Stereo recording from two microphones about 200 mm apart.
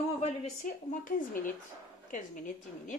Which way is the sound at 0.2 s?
35° left (ahead or behind).